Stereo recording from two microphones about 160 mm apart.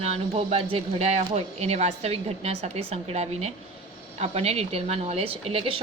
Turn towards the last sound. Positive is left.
turn(degrees=-35)  # may be behind; listen again after turning